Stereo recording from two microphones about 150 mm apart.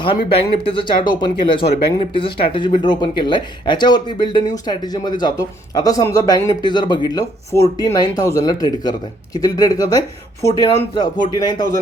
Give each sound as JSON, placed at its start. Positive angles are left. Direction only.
{"t": 0.0, "sound": "speech", "side_deg": 35}